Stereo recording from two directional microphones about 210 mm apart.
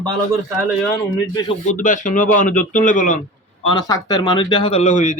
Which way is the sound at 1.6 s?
40° left (ahead or behind).